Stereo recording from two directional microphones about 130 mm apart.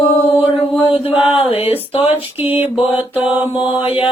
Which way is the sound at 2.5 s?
15° right (ahead or behind).